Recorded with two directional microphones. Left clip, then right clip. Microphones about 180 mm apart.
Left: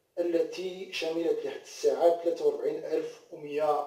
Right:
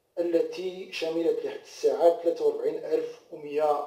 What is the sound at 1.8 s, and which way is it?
Speech, 35° right (ahead or behind).